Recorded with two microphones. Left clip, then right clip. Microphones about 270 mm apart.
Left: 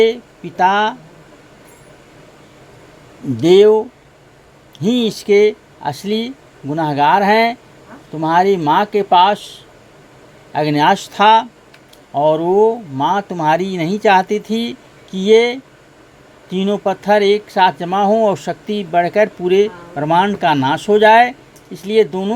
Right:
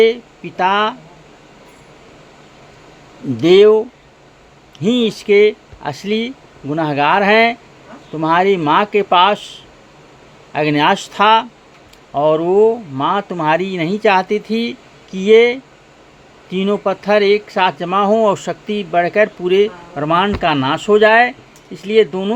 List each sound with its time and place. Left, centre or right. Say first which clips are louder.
0.0 s speech: right 1 dB; left
3.4 s speech: even; left
10.5 s speech: even; centre
14.6 s a sound: right 2 dB; left
15.2 s speech: right 2 dB; left
16.6 s speech: right 1 dB; left